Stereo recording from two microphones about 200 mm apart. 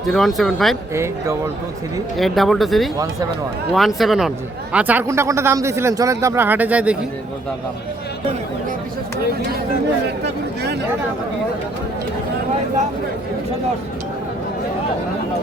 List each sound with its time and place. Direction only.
0.1 s speech: centre (ahead or behind)
0.9 s speech: 15° right (ahead or behind)
2.1 s speech: centre (ahead or behind)
10.2 s a sound: 55° right (ahead or behind)